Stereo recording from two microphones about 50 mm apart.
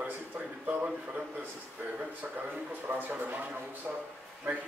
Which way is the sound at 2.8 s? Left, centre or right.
Right.